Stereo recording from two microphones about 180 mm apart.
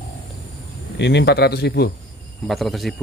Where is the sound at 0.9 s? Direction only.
75° left (ahead or behind).